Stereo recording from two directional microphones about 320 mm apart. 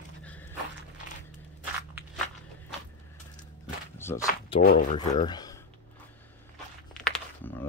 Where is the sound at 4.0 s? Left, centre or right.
Centre.